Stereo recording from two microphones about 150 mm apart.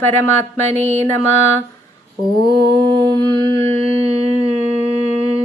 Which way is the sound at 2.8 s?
30° right (ahead or behind).